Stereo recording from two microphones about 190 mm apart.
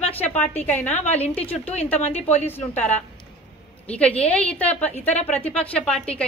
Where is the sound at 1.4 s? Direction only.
30° left (ahead or behind).